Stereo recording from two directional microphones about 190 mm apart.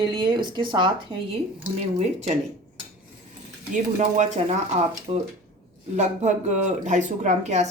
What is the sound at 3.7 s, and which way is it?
Speech, 40° right (ahead or behind).